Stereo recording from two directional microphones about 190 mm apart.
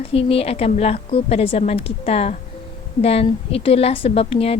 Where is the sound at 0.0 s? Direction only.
30° left (ahead or behind).